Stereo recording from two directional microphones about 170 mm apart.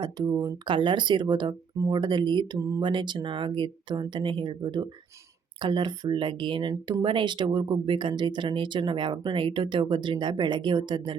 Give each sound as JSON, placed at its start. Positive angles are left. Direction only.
{"t": 0.0, "sound": "speech", "side_deg": -25}